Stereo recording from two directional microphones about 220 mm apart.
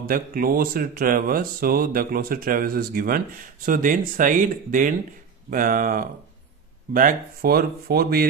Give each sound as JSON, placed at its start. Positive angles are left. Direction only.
{"t": 0.0, "sound": "speech", "side_deg": -40}